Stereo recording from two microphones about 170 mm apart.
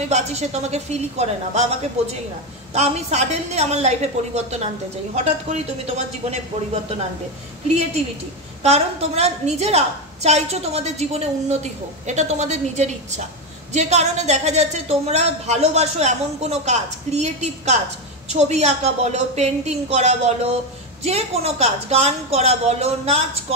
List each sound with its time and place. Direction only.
0.1 s a woman's voice: 40° right (ahead or behind)
2.7 s a woman's voice: 40° right (ahead or behind)
7.6 s a woman's voice: 40° right (ahead or behind)